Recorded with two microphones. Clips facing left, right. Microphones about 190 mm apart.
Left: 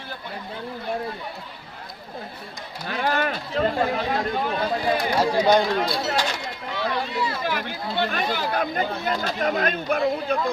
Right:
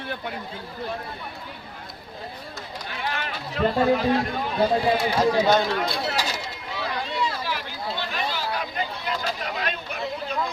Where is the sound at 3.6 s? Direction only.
35° left (ahead or behind).